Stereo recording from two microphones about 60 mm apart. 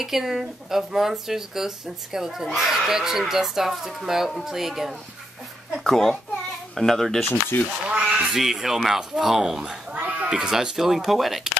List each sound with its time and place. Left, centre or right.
0.0 s a child's voice: centre
5.9 s a child's voice: centre
7.5 s speech: left
7.9 s a sound: centre
8.3 s speech: centre
9.9 s a sound: right
10.3 s speech: centre